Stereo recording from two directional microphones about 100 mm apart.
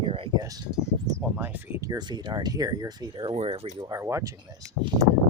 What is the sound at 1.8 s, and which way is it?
Speech, 40° right (ahead or behind).